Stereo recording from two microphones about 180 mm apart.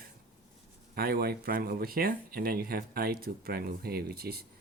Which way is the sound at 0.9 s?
60° right (ahead or behind).